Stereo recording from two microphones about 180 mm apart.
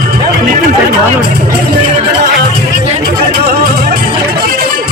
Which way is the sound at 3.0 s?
60° right (ahead or behind).